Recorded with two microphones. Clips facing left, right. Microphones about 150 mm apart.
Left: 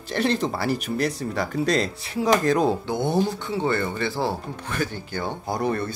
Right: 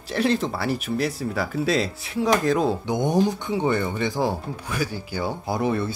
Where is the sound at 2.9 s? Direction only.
15° right (ahead or behind).